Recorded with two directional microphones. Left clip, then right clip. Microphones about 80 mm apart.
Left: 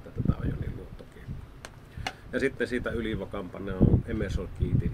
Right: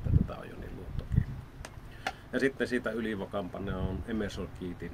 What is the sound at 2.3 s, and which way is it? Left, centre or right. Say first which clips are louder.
Speech: left 2 dB; right.